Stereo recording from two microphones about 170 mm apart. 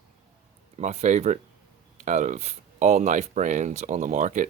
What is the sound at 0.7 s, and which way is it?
Speech, 40° right (ahead or behind).